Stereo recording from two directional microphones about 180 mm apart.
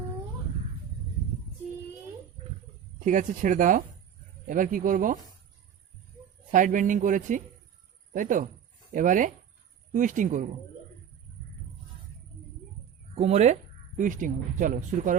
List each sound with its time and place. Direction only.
3.0 s speech: 45° right (ahead or behind)
6.5 s speech: 45° right (ahead or behind)
13.1 s speech: 35° right (ahead or behind)